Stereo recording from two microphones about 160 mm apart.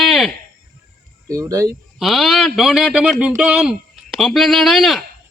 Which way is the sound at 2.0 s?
Centre (ahead or behind).